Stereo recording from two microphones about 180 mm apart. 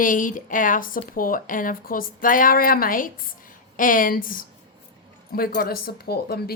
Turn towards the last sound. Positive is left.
turn(degrees=60)  # may be behind; listen again after turning